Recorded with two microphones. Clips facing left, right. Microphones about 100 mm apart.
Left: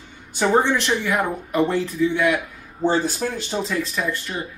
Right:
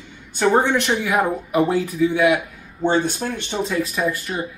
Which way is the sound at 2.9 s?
5° left (ahead or behind).